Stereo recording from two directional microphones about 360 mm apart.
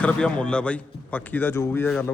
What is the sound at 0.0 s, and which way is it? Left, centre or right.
A man's voice, centre.